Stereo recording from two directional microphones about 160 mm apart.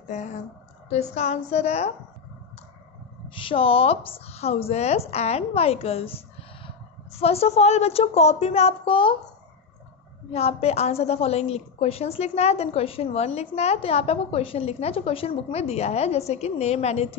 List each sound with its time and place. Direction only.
0.0 s a woman's voice: 50° left (ahead or behind)
3.3 s a woman's voice: 35° left (ahead or behind)
10.3 s a woman's voice: 40° left (ahead or behind)